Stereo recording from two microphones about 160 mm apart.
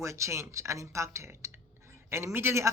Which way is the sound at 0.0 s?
20° right (ahead or behind).